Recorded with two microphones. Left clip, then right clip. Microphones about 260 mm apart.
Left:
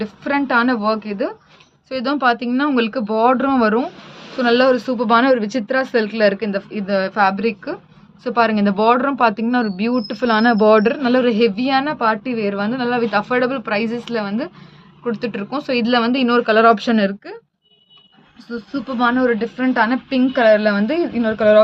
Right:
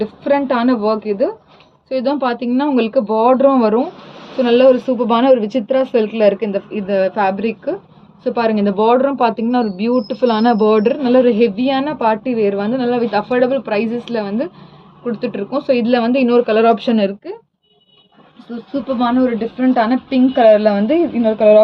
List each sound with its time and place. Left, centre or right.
0.0 s a man's voice: left
18.9 s a man's voice: left